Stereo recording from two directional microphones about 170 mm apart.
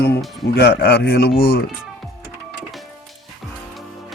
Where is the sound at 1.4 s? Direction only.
65° left (ahead or behind).